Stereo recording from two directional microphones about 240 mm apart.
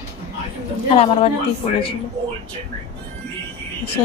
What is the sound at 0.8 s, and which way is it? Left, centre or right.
Speech, left.